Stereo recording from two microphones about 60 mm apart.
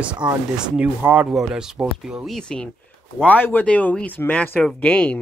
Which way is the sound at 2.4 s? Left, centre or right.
Centre.